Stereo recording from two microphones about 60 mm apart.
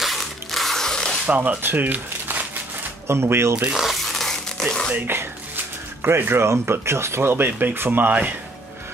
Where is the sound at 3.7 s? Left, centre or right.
Centre.